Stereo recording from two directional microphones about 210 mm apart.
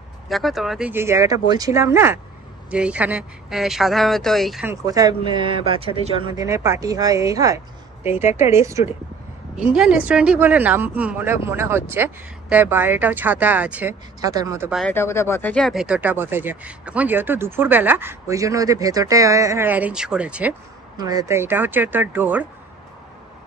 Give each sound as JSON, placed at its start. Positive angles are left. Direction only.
{"t": 0.3, "sound": "speech", "side_deg": 0}
{"t": 4.6, "sound": "speech", "side_deg": -15}
{"t": 6.4, "sound": "speech", "side_deg": -15}
{"t": 14.2, "sound": "speech", "side_deg": -15}
{"t": 14.7, "sound": "speech", "side_deg": 5}
{"t": 21.0, "sound": "speech", "side_deg": -15}